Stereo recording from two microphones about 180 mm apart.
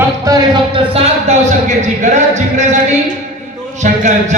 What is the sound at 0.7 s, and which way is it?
Music, 35° right (ahead or behind).